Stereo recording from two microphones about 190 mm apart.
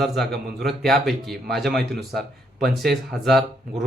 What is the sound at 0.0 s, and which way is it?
Speech, centre (ahead or behind).